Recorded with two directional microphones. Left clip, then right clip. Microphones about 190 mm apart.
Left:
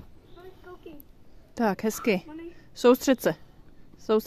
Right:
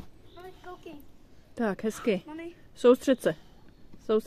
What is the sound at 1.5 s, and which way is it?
Speech, 20° left (ahead or behind).